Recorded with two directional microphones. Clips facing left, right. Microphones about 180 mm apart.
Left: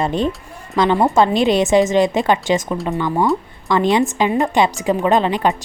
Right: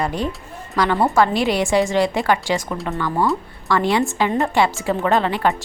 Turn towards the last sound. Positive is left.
turn(degrees=20)  # may be behind; listen again after turning